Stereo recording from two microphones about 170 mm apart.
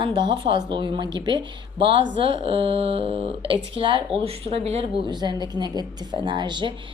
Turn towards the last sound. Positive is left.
turn(degrees=-25)  # may be behind; listen again after turning